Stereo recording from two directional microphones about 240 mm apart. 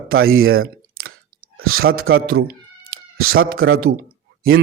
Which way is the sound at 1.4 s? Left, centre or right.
Right.